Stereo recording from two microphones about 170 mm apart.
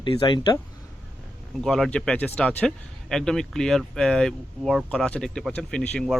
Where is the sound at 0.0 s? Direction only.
30° left (ahead or behind).